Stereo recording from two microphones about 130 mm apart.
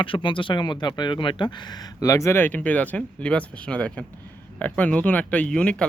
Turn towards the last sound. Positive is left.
turn(degrees=5)  # may be behind; listen again after turning